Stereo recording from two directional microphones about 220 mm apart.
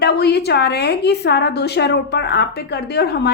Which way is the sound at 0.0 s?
50° left (ahead or behind).